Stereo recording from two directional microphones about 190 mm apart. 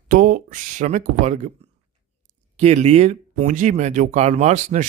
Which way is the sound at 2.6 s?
35° right (ahead or behind).